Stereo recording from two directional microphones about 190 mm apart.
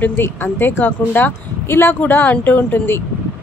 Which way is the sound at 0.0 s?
10° left (ahead or behind).